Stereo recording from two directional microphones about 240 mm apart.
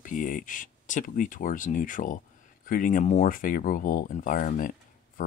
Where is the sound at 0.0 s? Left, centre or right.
Left.